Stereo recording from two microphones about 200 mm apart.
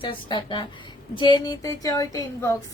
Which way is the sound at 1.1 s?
20° left (ahead or behind).